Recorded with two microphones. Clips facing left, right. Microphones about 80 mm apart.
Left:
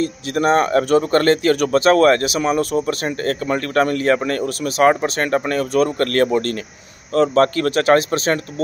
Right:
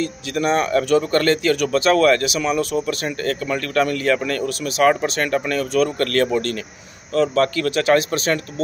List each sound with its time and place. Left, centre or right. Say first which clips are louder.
0.0 s speech: left 3 dB; left